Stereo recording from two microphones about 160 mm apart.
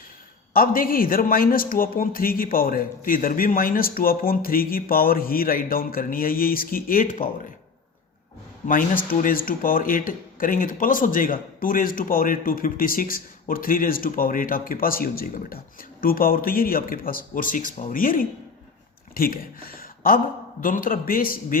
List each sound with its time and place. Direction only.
0.5 s speech: 60° left (ahead or behind)
8.6 s speech: 60° left (ahead or behind)